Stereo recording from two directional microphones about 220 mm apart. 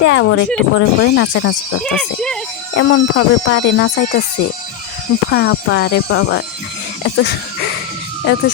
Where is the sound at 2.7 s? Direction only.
55° left (ahead or behind).